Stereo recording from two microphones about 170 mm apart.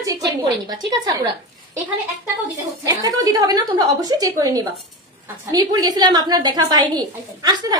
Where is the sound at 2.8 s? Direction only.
20° right (ahead or behind).